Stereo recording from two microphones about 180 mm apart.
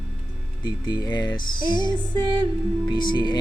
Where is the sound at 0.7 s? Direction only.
25° left (ahead or behind).